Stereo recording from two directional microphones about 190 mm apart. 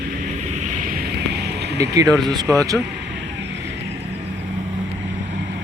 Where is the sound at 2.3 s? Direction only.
20° right (ahead or behind).